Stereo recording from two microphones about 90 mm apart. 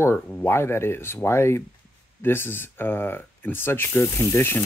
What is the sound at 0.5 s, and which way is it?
Speech, 30° left (ahead or behind).